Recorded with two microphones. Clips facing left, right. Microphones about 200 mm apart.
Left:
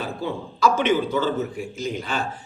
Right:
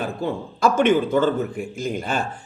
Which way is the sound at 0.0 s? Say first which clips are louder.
Right 3 dB; 50° right (ahead or behind).